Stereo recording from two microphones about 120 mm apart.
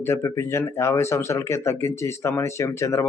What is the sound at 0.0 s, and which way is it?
Speech, 25° left (ahead or behind).